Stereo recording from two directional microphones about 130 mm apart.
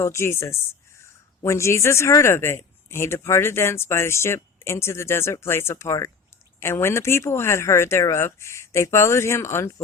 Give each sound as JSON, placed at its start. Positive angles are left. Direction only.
{"t": 0.0, "sound": "speech", "side_deg": 20}